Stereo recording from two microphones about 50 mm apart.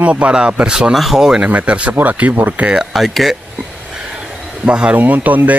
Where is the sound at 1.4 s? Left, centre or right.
Right.